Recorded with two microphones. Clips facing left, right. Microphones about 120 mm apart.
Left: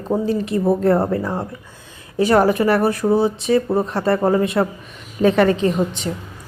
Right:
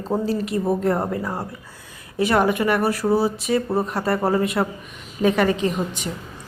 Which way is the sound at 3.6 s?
Centre (ahead or behind).